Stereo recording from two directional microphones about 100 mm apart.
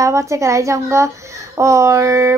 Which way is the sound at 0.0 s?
30° right (ahead or behind).